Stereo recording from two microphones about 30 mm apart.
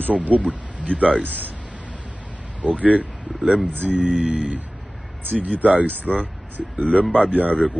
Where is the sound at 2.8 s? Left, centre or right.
Right.